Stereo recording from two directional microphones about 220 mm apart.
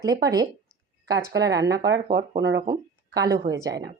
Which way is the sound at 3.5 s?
35° right (ahead or behind).